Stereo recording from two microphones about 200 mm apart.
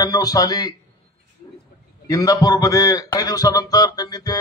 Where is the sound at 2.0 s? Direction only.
15° left (ahead or behind).